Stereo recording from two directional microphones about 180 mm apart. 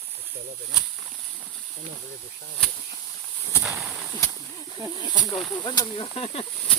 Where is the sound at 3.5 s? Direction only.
15° right (ahead or behind).